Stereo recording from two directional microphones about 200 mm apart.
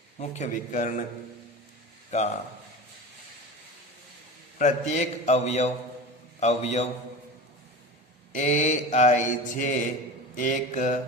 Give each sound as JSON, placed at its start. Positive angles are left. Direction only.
{"t": 0.2, "sound": "mantra", "side_deg": 35}
{"t": 2.0, "sound": "speech", "side_deg": 35}
{"t": 4.5, "sound": "mantra", "side_deg": 35}
{"t": 8.4, "sound": "mantra", "side_deg": 35}